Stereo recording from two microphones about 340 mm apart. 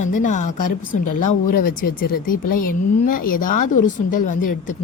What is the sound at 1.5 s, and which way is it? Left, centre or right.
Speech, left.